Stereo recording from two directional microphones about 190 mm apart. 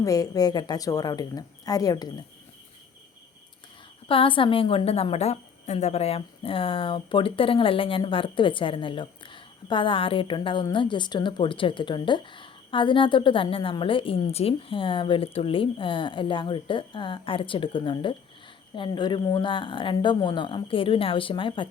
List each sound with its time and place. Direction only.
0.0 s a woman's voice: 20° left (ahead or behind)
4.1 s a woman's voice: 25° left (ahead or behind)